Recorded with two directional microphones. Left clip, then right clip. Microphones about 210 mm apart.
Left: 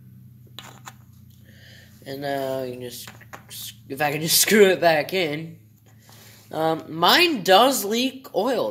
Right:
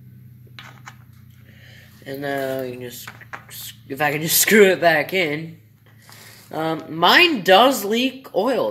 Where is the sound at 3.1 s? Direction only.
30° left (ahead or behind).